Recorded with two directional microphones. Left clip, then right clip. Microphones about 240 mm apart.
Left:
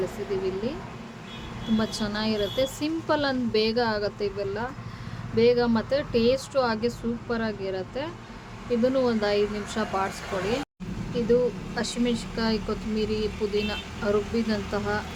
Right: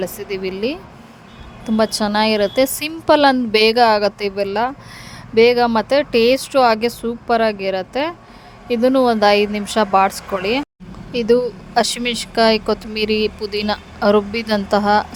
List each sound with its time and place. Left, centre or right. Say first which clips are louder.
0.3 s speech: right 7 dB; right
1.8 s speech: right 16 dB; right
11.1 s speech: right 7 dB; right